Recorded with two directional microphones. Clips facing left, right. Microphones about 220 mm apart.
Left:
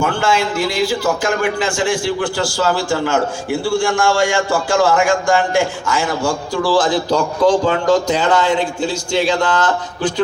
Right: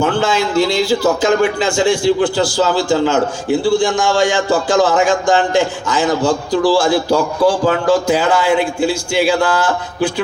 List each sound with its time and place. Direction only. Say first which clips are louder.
0.0 s a man's voice: right 2 dB; 20° right (ahead or behind)